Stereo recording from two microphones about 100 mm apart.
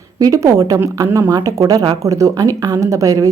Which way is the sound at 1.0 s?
25° right (ahead or behind).